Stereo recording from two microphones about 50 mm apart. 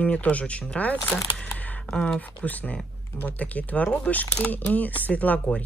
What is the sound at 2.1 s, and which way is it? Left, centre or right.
Speech, left.